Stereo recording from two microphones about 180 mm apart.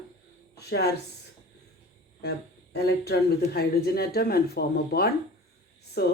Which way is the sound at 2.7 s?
65° left (ahead or behind).